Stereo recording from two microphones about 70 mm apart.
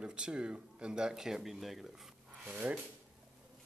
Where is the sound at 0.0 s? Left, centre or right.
Centre.